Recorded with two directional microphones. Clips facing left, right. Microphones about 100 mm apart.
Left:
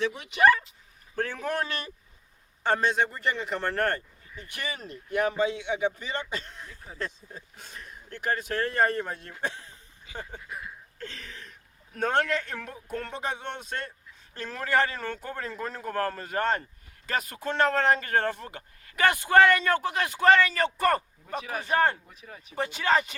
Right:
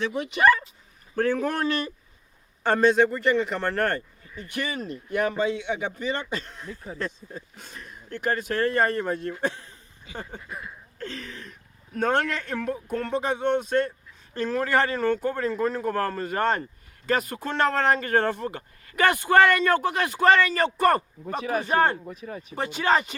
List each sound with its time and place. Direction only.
0.0 s speech: 45° right (ahead or behind)
8.1 s speech: 50° right (ahead or behind)
10.4 s speech: centre (ahead or behind)
11.0 s a sound: 45° right (ahead or behind)
11.9 s speech: 50° right (ahead or behind)